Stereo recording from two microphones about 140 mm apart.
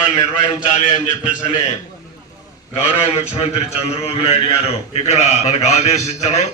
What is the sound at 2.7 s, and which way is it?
A man's voice, 50° left (ahead or behind).